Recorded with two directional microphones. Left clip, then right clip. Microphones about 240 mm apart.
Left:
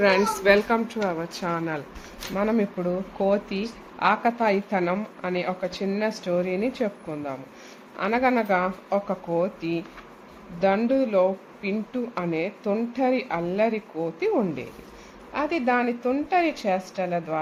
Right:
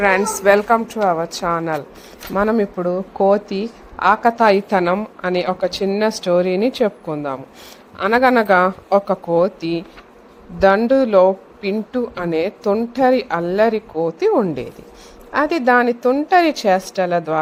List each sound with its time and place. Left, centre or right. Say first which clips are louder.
0.0 s a woman's voice: right 5 dB; centre; by 17.4 s right